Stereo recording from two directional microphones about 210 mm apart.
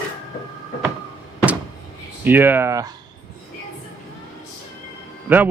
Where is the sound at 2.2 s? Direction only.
10° right (ahead or behind).